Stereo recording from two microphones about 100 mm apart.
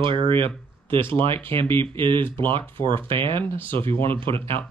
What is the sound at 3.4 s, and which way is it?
Speech, 20° left (ahead or behind).